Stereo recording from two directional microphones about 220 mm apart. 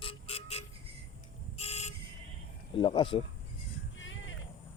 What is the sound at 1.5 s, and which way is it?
Vehicle, 30° left (ahead or behind).